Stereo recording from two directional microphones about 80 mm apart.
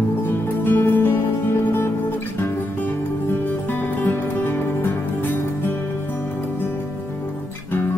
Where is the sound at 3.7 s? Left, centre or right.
Left.